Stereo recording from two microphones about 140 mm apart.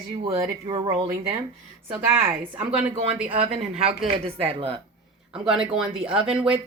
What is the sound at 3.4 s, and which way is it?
A woman's voice, 45° right (ahead or behind).